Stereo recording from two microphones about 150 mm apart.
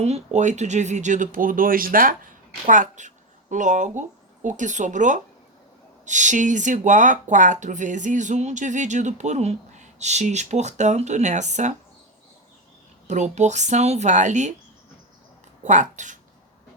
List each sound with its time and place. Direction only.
0.0 s speech: 50° right (ahead or behind)
13.1 s speech: 50° right (ahead or behind)
15.6 s speech: 55° right (ahead or behind)